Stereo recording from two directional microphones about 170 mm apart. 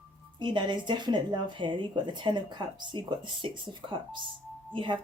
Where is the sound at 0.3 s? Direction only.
25° right (ahead or behind).